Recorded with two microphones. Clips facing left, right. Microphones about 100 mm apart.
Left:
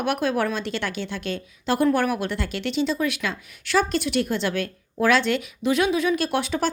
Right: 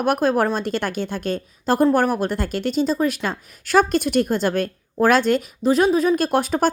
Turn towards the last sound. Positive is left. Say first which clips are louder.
# right 5 dB
turn(degrees=-45)  # may be behind; listen again after turning